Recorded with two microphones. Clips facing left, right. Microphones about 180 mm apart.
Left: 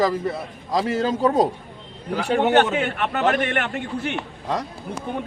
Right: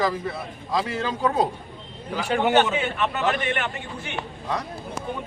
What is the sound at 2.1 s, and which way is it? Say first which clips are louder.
A man's voice: left 2 dB; 55° left (ahead or behind).